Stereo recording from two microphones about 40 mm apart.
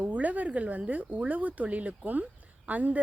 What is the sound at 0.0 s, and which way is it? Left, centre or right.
Speech, right.